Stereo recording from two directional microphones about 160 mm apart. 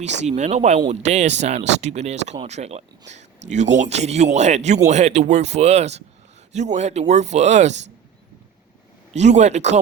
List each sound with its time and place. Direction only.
0.0 s a man's voice: 45° right (ahead or behind)
9.1 s a man's voice: 45° right (ahead or behind)